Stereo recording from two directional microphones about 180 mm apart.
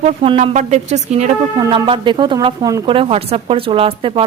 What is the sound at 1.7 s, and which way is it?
Speech, 25° right (ahead or behind).